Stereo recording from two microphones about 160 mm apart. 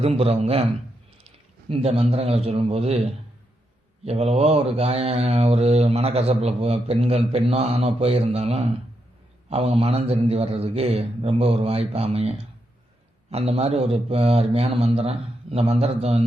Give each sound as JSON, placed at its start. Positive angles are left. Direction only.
{"t": 0.0, "sound": "mantra", "side_deg": -40}
{"t": 1.7, "sound": "mantra", "side_deg": -40}
{"t": 4.0, "sound": "mantra", "side_deg": -40}
{"t": 13.3, "sound": "mantra", "side_deg": -40}